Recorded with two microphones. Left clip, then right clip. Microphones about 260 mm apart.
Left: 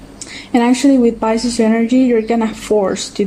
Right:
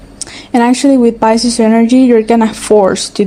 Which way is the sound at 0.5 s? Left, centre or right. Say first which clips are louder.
Right 3 dB; right.